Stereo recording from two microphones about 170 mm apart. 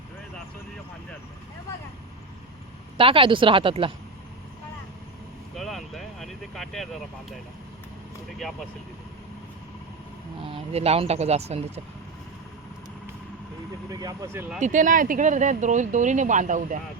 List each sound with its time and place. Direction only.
3.0 s speech: 30° right (ahead or behind)
5.5 s vehicle: centre (ahead or behind)
10.4 s speech: 35° right (ahead or behind)
13.9 s speech: 20° right (ahead or behind)
14.6 s speech: 50° right (ahead or behind)